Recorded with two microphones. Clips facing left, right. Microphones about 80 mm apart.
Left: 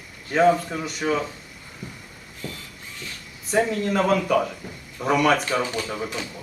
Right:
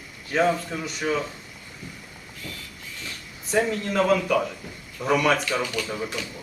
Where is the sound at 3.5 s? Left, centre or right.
Centre.